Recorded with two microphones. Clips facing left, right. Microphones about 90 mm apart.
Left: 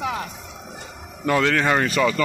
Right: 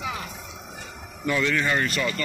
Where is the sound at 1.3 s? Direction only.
80° left.